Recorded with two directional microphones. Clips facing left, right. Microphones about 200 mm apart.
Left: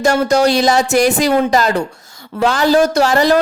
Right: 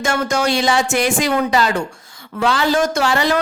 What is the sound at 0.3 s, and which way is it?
Speech, 35° left (ahead or behind).